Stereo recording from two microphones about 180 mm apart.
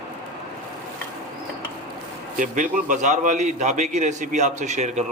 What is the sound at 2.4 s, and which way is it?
A man's voice, 45° right (ahead or behind).